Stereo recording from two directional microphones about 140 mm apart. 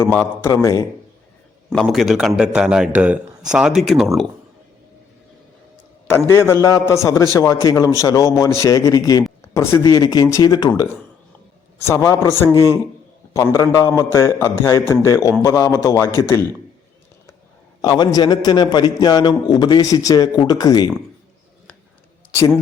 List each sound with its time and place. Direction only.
0.4 s a man's voice: 25° left (ahead or behind)
1.7 s a man's voice: centre (ahead or behind)
6.1 s a man's voice: 20° left (ahead or behind)
11.9 s a man's voice: 20° left (ahead or behind)
17.8 s a man's voice: 30° left (ahead or behind)
22.3 s a man's voice: 20° left (ahead or behind)